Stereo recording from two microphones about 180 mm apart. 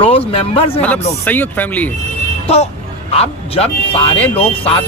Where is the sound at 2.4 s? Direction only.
35° left (ahead or behind).